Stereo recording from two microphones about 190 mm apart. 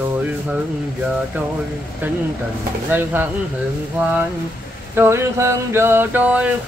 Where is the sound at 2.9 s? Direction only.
10° right (ahead or behind).